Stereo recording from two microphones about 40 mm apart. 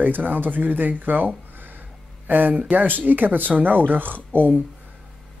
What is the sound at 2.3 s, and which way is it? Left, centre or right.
Speech, right.